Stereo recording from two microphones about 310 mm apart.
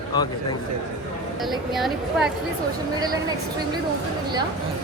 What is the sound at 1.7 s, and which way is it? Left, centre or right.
Speech, centre.